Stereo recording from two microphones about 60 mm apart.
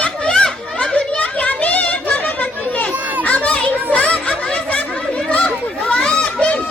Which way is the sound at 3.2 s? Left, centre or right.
Left.